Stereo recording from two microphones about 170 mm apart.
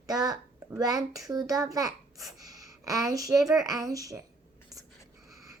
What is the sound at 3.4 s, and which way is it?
Speech, 20° right (ahead or behind).